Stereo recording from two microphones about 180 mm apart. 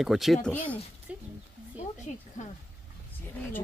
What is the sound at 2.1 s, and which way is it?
Speech, 40° left (ahead or behind).